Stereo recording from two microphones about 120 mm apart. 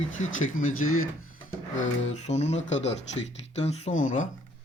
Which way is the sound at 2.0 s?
65° left (ahead or behind).